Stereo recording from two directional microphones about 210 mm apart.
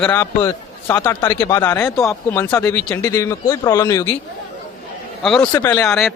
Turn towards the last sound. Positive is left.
turn(degrees=0)  # may be behind; listen again after turning